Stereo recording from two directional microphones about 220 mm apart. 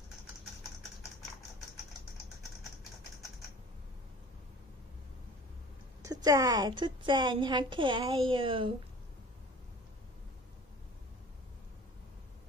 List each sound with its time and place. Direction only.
6.0 s a woman's voice: 15° right (ahead or behind)